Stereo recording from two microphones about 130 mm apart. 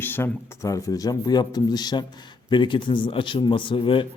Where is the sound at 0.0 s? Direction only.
15° left (ahead or behind).